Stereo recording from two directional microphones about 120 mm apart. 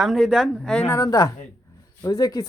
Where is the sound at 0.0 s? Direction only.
Centre (ahead or behind).